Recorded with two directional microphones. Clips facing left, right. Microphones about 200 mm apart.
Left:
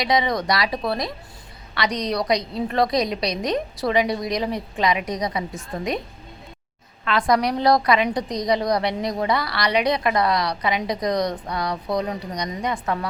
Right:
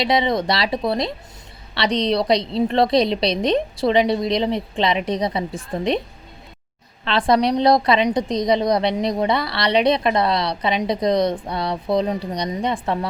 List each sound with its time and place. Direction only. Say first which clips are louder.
0.0 s a woman's voice: right 3 dB; 25° right (ahead or behind)
7.0 s a woman's voice: right 3 dB; 30° right (ahead or behind)